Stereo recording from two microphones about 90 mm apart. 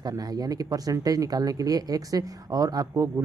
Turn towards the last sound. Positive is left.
turn(degrees=-40)  # may be behind; listen again after turning